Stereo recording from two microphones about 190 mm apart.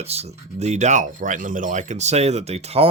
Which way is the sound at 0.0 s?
35° right (ahead or behind).